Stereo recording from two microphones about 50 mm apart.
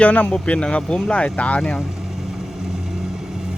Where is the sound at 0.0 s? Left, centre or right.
Left.